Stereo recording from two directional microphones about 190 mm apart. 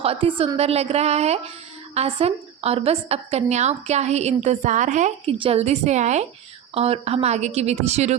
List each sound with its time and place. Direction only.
0.0 s a woman's voice: 30° right (ahead or behind)